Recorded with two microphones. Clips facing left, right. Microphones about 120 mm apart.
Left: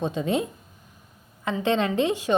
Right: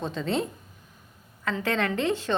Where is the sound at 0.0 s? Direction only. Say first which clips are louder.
Left 3 dB; 15° left (ahead or behind).